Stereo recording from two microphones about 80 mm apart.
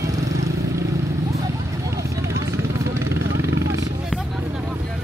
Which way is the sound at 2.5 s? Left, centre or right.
Right.